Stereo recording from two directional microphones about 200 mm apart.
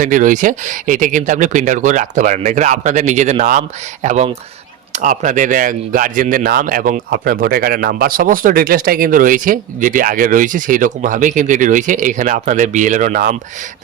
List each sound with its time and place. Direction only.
0.0 s speech: 40° right (ahead or behind)